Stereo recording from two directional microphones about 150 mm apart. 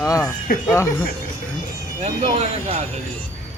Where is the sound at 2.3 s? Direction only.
45° right (ahead or behind).